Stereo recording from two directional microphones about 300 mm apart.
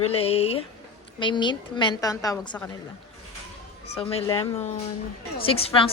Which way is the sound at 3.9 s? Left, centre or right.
Centre.